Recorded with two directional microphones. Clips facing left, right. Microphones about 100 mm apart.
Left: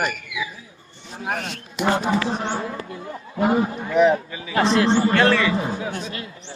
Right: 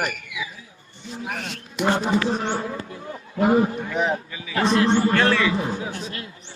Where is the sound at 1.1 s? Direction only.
45° left (ahead or behind).